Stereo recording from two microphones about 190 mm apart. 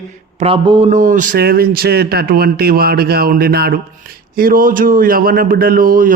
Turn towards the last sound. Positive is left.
turn(degrees=-50)  # may be behind; listen again after turning